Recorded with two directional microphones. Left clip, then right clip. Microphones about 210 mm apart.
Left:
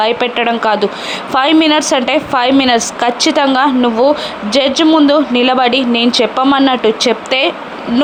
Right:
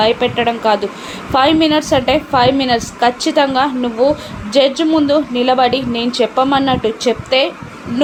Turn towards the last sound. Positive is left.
turn(degrees=20)  # may be behind; listen again after turning